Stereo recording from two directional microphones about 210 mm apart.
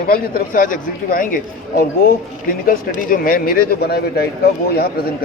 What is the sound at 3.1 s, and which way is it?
Speech, 40° left (ahead or behind).